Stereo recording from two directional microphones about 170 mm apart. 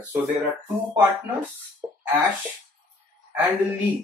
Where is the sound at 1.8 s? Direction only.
10° right (ahead or behind).